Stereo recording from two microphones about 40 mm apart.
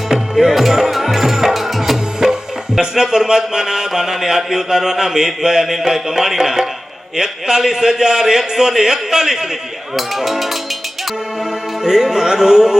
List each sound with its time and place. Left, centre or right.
0.4 s music: centre
2.7 s a man's voice: centre
11.8 s a man's voice: centre